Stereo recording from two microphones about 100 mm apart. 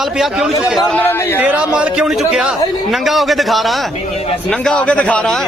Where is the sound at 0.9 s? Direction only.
20° left (ahead or behind).